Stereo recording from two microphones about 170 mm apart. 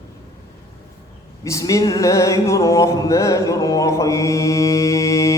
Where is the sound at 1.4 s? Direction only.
20° left (ahead or behind).